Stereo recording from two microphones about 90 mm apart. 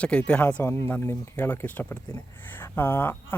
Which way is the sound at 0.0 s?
10° left (ahead or behind).